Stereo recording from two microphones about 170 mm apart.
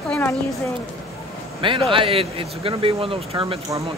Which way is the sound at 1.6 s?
30° right (ahead or behind).